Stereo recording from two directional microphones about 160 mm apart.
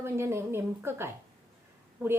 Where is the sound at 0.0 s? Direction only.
15° right (ahead or behind).